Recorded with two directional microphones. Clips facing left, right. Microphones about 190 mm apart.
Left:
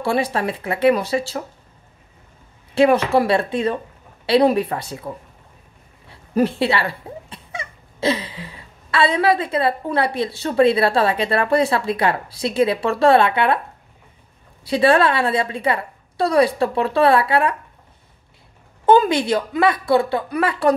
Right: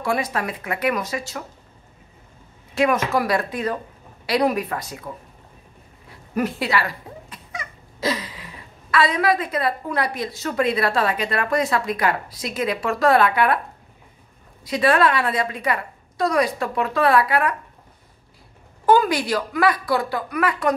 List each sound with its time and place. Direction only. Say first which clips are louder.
0.0 s a woman's voice: left 3 dB; 30° left (ahead or behind)
2.7 s a woman's voice: left 5 dB; 30° left (ahead or behind)
14.6 s a woman's voice: left 3 dB; 30° left (ahead or behind)
18.9 s a woman's voice: left 3 dB; 25° left (ahead or behind)